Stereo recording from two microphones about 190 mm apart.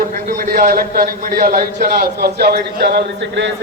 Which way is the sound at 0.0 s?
45° right (ahead or behind).